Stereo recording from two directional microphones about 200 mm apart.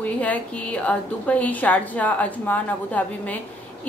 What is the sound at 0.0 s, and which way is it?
A woman's voice, 5° left (ahead or behind).